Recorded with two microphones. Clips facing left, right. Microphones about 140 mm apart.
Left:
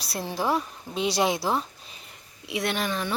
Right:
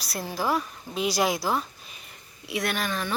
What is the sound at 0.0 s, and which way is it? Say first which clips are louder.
A woman's voice: left 1 dB; 25° left (ahead or behind).